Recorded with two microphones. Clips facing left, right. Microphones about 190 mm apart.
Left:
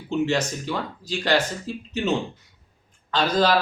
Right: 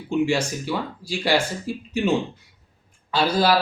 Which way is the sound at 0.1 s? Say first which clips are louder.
Right 1 dB; 10° right (ahead or behind).